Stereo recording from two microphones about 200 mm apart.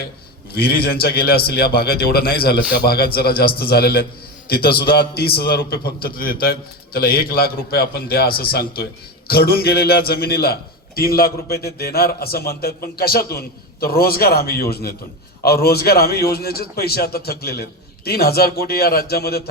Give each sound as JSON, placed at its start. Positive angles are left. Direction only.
{"t": 0.5, "sound": "a man's voice", "side_deg": 50}